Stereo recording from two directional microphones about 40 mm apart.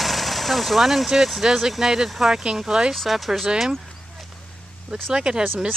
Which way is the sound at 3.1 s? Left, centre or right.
Centre.